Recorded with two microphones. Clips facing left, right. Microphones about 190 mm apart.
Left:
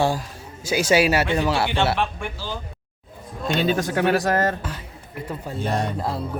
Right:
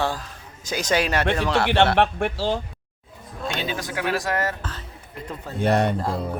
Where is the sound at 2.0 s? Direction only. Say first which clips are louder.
Right 6 dB; 70° right (ahead or behind).